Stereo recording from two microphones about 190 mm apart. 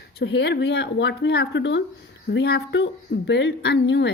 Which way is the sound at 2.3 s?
60° left (ahead or behind).